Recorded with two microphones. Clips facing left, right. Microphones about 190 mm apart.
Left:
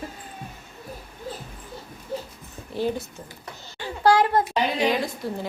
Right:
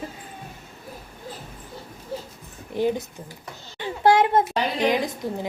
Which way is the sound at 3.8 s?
20° right (ahead or behind).